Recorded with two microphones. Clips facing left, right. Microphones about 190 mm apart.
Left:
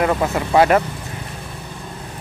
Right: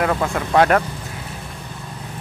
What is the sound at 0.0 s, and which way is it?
Speech, 5° left (ahead or behind).